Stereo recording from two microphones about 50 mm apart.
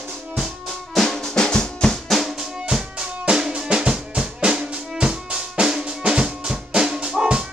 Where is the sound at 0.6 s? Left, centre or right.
Centre.